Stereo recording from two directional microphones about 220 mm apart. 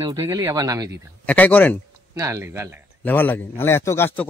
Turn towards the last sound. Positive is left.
turn(degrees=10)  # may be behind; listen again after turning